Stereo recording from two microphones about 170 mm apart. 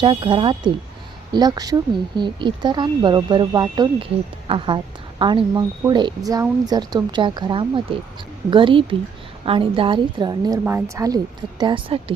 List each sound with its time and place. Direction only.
0.0 s speech: 30° right (ahead or behind)
10.6 s speech: 10° right (ahead or behind)
11.6 s speech: 30° right (ahead or behind)